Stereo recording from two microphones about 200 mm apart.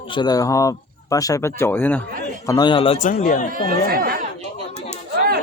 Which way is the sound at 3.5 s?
45° right (ahead or behind).